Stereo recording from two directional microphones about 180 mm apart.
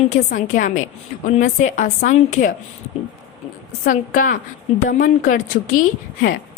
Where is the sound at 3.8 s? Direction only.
50° left (ahead or behind).